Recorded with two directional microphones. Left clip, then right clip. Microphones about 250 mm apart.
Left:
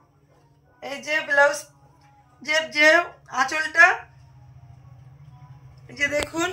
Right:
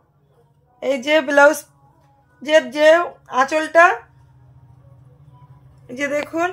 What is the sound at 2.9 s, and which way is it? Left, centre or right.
Speech, right.